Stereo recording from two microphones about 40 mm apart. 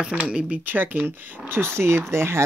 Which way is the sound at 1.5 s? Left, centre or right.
Right.